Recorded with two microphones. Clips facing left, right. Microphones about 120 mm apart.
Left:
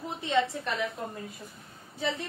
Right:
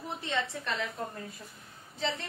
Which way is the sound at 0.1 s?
15° left (ahead or behind).